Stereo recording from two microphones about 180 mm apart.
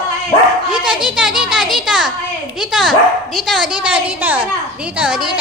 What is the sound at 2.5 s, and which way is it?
Dog, centre (ahead or behind).